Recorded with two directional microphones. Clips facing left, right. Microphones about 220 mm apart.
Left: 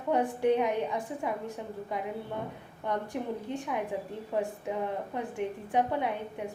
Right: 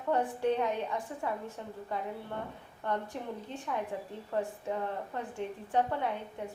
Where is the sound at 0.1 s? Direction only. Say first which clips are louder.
Left 3 dB; 15° left (ahead or behind).